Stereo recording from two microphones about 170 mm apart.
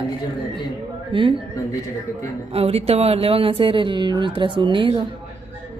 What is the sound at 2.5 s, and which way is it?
Speech, 35° right (ahead or behind).